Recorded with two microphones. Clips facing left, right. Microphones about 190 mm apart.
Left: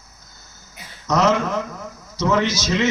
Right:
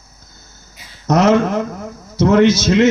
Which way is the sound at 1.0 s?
55° right (ahead or behind).